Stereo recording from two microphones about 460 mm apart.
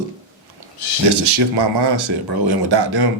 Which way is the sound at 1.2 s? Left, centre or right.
Right.